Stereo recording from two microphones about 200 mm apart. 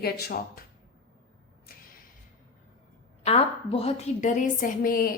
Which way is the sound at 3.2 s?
30° left (ahead or behind).